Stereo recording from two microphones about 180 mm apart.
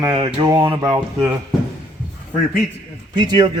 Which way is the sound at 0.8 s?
10° right (ahead or behind).